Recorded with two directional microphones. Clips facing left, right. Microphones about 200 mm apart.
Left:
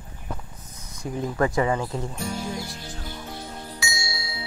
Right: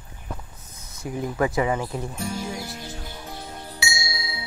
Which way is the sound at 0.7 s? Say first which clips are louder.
Even; 5° right (ahead or behind).